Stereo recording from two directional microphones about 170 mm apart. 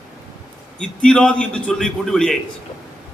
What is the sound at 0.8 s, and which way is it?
A man's voice, 5° left (ahead or behind).